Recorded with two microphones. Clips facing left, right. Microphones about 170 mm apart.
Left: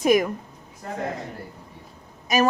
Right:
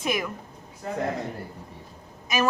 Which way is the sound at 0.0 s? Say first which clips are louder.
Left 9 dB; 40° left (ahead or behind).